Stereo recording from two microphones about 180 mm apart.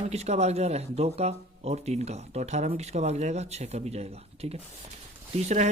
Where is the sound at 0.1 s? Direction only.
35° right (ahead or behind).